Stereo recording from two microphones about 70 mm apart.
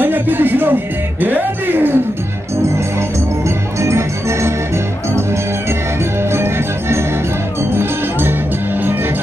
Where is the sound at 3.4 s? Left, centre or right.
Right.